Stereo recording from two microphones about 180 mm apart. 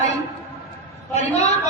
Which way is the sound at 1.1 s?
40° left (ahead or behind).